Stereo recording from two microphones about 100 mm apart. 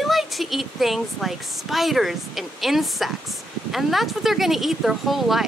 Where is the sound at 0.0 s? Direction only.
Centre (ahead or behind).